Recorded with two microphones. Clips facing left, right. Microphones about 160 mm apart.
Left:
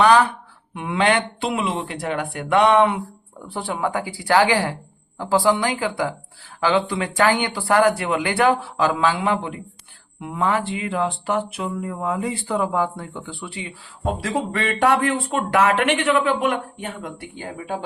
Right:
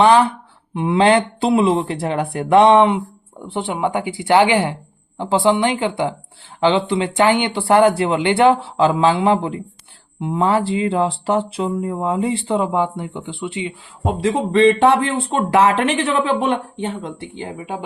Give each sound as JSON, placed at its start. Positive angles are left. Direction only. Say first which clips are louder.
{"t": 0.0, "sound": "speech", "louder": "right 3 dB", "side_deg": -25}